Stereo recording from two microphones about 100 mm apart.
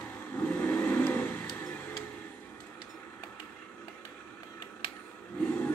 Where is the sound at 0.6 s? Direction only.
15° left (ahead or behind).